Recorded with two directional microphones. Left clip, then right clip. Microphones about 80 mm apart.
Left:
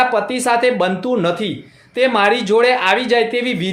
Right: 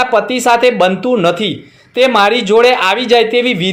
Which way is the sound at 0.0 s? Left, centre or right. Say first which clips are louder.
Right 4 dB; right.